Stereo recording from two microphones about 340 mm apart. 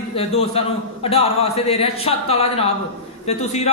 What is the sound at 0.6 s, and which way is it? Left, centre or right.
A woman's voice, centre.